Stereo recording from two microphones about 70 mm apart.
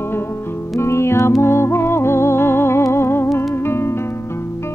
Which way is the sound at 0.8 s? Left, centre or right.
Left.